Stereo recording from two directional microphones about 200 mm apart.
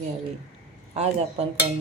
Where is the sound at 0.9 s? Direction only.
30° right (ahead or behind).